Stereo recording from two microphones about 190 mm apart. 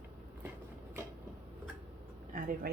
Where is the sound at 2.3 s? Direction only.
50° right (ahead or behind).